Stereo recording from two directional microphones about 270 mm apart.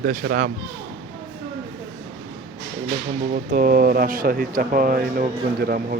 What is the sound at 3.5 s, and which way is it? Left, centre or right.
Speech, right.